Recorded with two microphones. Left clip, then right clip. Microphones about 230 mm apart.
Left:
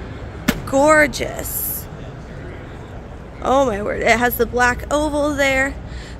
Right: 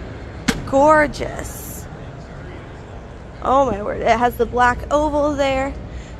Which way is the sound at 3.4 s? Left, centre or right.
Left.